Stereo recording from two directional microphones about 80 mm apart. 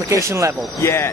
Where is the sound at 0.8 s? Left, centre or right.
Left.